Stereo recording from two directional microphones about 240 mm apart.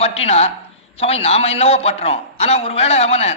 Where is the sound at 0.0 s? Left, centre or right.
Left.